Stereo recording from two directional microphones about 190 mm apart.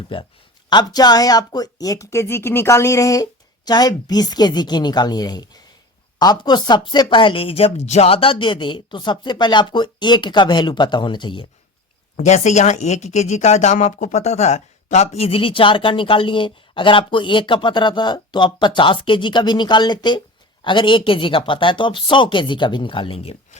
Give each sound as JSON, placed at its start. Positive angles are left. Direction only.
{"t": 0.1, "sound": "a woman's voice", "side_deg": 25}
{"t": 12.1, "sound": "speech", "side_deg": 40}